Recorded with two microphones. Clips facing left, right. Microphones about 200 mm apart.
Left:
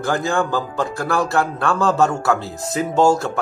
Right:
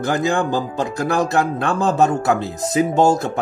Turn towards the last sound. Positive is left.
turn(degrees=-20)  # may be behind; listen again after turning